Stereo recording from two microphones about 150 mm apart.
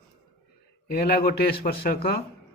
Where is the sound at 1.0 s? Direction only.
90° left.